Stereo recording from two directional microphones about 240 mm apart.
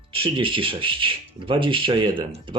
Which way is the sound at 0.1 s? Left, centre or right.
Right.